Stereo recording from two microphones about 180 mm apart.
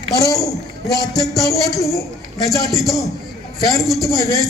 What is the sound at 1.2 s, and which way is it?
Speech, centre (ahead or behind).